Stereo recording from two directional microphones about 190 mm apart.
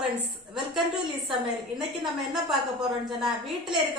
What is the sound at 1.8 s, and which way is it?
A woman's voice, centre (ahead or behind).